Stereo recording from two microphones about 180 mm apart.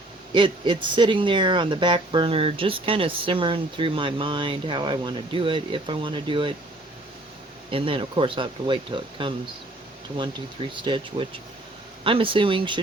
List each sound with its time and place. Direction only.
0.3 s speech: 25° right (ahead or behind)
7.7 s speech: 30° right (ahead or behind)
10.8 s speech: 25° right (ahead or behind)